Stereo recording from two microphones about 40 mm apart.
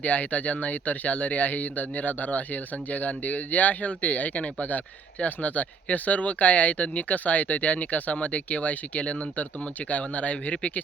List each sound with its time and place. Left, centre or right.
0.0 s speech: left